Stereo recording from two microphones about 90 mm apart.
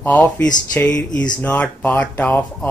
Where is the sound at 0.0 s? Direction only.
20° left (ahead or behind).